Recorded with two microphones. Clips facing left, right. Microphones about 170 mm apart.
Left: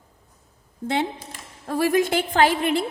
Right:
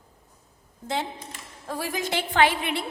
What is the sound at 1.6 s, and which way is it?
A woman's voice, 60° left (ahead or behind).